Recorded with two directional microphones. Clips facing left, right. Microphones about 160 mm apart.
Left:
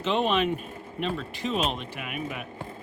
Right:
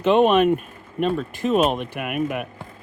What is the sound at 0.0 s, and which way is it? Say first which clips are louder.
Speech: right 9 dB; 55° right (ahead or behind).